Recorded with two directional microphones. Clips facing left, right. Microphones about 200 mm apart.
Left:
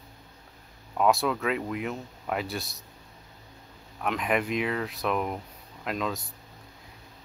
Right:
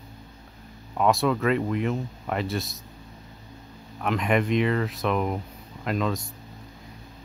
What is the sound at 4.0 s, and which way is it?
Speech, centre (ahead or behind).